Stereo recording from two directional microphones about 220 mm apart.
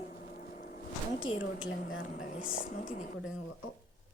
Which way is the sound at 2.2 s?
40° left (ahead or behind).